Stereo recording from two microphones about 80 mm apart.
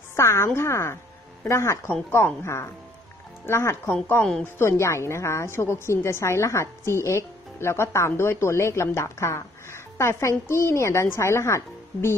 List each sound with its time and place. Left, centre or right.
0.1 s a woman's voice: left